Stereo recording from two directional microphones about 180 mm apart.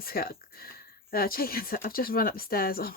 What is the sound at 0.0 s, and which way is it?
Speech, 55° left (ahead or behind).